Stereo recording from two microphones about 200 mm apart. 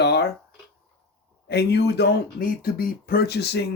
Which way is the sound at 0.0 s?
55° left (ahead or behind).